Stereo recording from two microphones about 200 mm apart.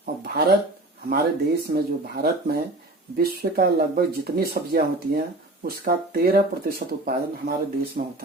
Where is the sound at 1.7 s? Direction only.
50° right (ahead or behind).